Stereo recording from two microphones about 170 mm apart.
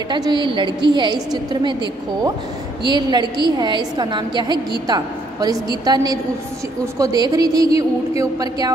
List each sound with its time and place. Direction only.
0.1 s a woman's voice: 25° right (ahead or behind)
2.8 s a woman's voice: 25° right (ahead or behind)